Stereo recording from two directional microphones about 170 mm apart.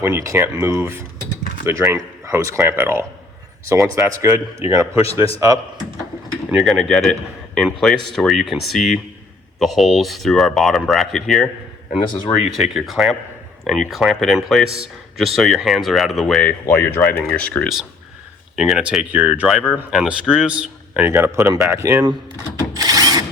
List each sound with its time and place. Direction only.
0.0 s speech: 15° right (ahead or behind)
5.0 s a man's voice: 35° left (ahead or behind)
6.5 s speech: centre (ahead or behind)
12.3 s speech: 15° left (ahead or behind)
12.7 s speech: centre (ahead or behind)
22.7 s a sound: 20° right (ahead or behind)